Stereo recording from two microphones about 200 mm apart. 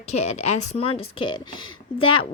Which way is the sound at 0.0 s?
35° left (ahead or behind).